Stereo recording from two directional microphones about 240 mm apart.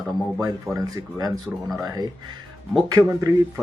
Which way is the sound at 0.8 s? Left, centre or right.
Centre.